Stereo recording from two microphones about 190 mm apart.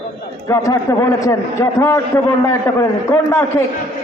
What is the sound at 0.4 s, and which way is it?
A man's voice, 15° left (ahead or behind).